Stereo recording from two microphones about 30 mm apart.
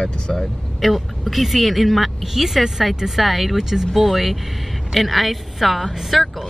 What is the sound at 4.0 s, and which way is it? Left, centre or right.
Speech, centre.